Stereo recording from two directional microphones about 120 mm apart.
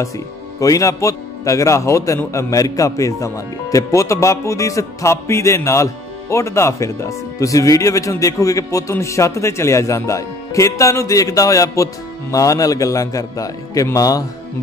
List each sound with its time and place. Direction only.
0.6 s speech: 25° left (ahead or behind)